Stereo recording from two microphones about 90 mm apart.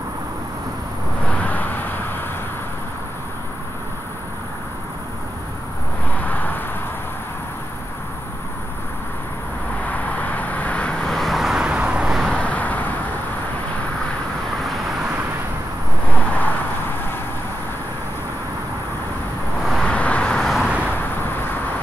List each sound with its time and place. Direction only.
1.3 s vehicle: 15° left (ahead or behind)
6.1 s a sound: 20° left (ahead or behind)
9.8 s vehicle: 15° left (ahead or behind); by 12.4 s centre (ahead or behind)
12.4 s vehicle: 15° left (ahead or behind)
16.1 s vehicle: 20° left (ahead or behind)
19.6 s vehicle: centre (ahead or behind)
19.9 s vehicle: 15° left (ahead or behind)
20.5 s vehicle: 10° right (ahead or behind)